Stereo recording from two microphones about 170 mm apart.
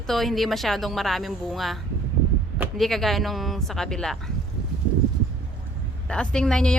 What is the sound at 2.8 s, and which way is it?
Speech, centre (ahead or behind).